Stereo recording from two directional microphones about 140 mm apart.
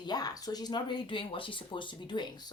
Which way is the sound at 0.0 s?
30° left (ahead or behind).